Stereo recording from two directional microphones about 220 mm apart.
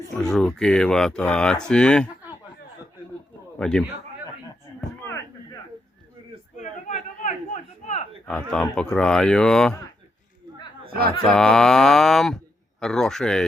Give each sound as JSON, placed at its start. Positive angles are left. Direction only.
{"t": 0.1, "sound": "speech", "side_deg": 0}
{"t": 3.6, "sound": "speech", "side_deg": 5}
{"t": 6.6, "sound": "a sound", "side_deg": 35}
{"t": 8.3, "sound": "speech", "side_deg": 5}
{"t": 10.8, "sound": "a sound", "side_deg": -40}
{"t": 11.3, "sound": "speech", "side_deg": 0}